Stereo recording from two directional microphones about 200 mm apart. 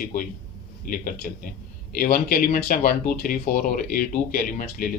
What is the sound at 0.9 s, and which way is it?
A man's voice, 40° left (ahead or behind).